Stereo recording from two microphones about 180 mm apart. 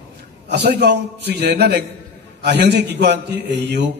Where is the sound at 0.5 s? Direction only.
65° right (ahead or behind).